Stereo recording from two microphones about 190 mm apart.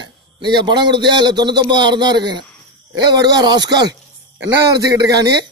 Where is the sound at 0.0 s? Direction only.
25° right (ahead or behind).